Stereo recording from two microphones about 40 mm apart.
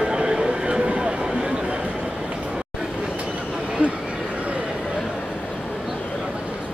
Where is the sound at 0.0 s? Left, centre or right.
Centre.